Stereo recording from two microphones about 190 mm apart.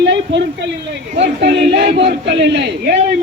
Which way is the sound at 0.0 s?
65° right (ahead or behind).